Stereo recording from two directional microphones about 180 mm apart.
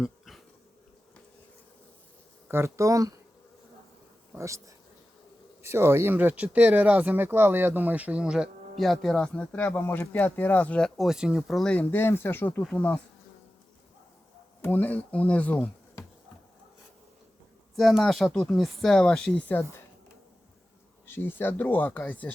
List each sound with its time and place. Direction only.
0.0 s bee: centre (ahead or behind)
2.5 s speech: 15° right (ahead or behind)
4.4 s speech: 15° right (ahead or behind); by 13.0 s 10° left (ahead or behind)
14.6 s speech: 10° left (ahead or behind)
17.7 s speech: centre (ahead or behind)
21.1 s speech: 10° left (ahead or behind)